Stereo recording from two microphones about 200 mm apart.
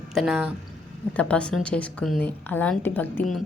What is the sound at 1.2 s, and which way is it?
A woman's voice, 5° left (ahead or behind).